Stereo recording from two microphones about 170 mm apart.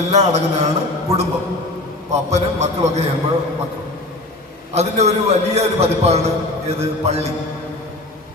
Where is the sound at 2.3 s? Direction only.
40° right (ahead or behind).